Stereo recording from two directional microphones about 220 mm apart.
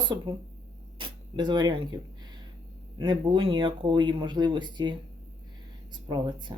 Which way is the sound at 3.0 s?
20° right (ahead or behind).